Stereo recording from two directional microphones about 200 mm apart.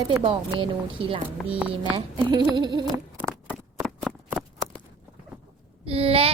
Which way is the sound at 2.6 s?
20° right (ahead or behind).